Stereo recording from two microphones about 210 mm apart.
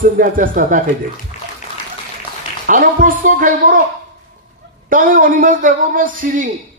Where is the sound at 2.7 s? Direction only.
40° right (ahead or behind).